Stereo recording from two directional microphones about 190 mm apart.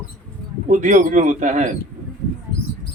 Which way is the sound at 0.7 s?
40° right (ahead or behind).